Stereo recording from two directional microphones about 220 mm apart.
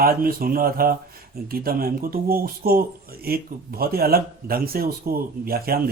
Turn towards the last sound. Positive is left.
turn(degrees=-45)  # may be behind; listen again after turning